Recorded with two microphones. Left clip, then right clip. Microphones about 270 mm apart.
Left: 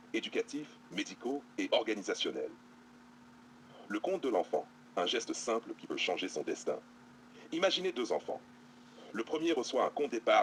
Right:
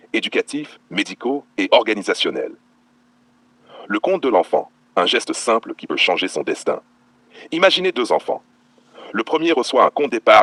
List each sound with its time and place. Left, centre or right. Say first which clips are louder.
0.1 s speech: right 16 dB; right
3.8 s speech: right 16 dB; right